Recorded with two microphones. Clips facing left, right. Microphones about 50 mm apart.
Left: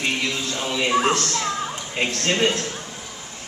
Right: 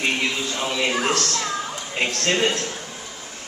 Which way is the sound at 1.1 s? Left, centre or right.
Left.